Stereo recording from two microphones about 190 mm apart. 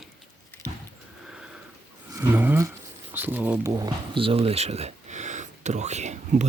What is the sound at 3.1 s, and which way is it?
Speech, 10° right (ahead or behind).